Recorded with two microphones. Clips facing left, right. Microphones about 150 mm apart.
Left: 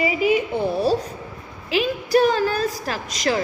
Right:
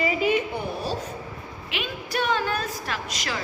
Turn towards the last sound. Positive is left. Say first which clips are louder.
# left 8 dB
turn(degrees=40)  # may be behind; listen again after turning